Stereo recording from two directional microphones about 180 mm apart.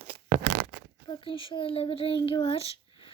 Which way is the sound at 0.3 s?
60° right (ahead or behind).